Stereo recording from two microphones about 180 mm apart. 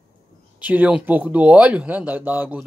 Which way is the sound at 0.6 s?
10° right (ahead or behind).